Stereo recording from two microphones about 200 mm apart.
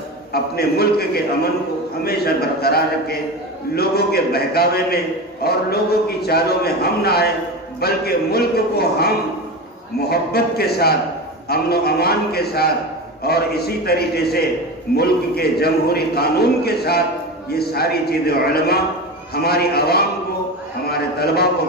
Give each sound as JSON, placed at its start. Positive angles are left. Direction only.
{"t": 0.3, "sound": "a man's voice", "side_deg": 50}